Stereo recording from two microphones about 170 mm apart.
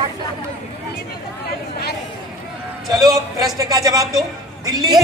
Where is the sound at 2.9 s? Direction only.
20° right (ahead or behind).